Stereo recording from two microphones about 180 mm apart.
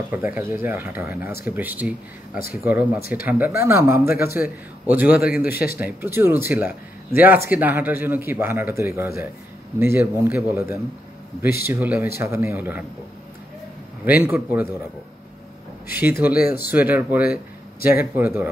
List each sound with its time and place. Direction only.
0.1 s speech: 10° right (ahead or behind)
5.5 s speech: 60° left (ahead or behind)
5.8 s speech: 10° right (ahead or behind)
14.2 s speech: 10° right (ahead or behind)
15.9 s speech: 10° right (ahead or behind)
16.3 s speech: 60° left (ahead or behind)
16.7 s speech: 10° right (ahead or behind)
17.2 s a sound: 55° left (ahead or behind)
17.8 s speech: 10° right (ahead or behind)